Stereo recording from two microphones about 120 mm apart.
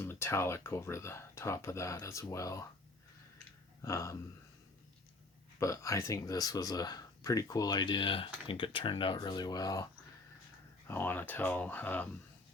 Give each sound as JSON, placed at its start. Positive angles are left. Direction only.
{"t": 0.0, "sound": "speech", "side_deg": 20}
{"t": 3.8, "sound": "speech", "side_deg": 25}
{"t": 5.5, "sound": "speech", "side_deg": 25}
{"t": 10.8, "sound": "speech", "side_deg": 15}